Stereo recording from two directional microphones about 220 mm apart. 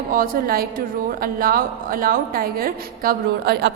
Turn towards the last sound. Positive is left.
turn(degrees=-45)  # may be behind; listen again after turning